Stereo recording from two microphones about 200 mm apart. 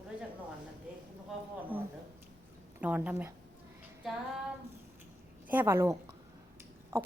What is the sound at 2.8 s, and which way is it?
Speech, 10° right (ahead or behind).